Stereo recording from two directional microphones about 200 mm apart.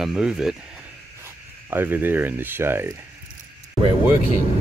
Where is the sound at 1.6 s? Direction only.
10° right (ahead or behind).